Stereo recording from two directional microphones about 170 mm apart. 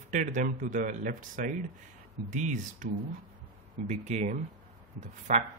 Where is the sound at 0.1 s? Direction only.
45° right (ahead or behind).